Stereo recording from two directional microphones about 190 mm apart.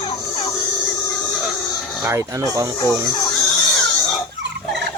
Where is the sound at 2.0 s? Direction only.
15° right (ahead or behind).